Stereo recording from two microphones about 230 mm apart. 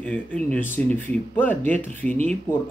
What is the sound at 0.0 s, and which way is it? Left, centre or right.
Speech, centre.